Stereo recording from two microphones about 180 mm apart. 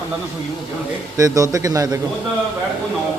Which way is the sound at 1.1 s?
20° right (ahead or behind).